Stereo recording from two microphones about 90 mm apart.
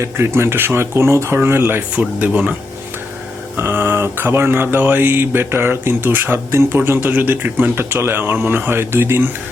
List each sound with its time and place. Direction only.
0.0 s speech: 30° right (ahead or behind)
2.0 s speech: 15° right (ahead or behind)
3.6 s speech: 25° right (ahead or behind)